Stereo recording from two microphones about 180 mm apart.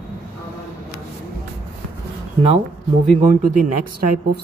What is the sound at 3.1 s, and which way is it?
Speech, 45° right (ahead or behind).